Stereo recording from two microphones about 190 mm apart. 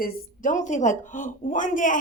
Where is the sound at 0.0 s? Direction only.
45° left (ahead or behind).